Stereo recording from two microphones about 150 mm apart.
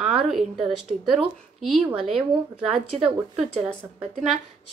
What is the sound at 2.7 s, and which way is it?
Speech, 40° right (ahead or behind).